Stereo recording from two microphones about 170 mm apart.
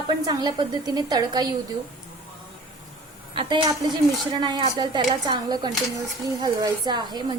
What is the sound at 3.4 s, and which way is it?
Speech, 25° right (ahead or behind).